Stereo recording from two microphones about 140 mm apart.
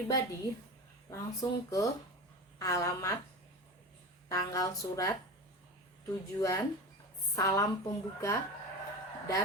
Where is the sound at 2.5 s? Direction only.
20° left (ahead or behind).